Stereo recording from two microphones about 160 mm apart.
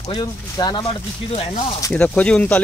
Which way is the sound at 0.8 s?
35° left (ahead or behind).